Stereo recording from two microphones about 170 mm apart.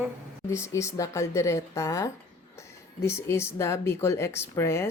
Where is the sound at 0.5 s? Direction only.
15° left (ahead or behind).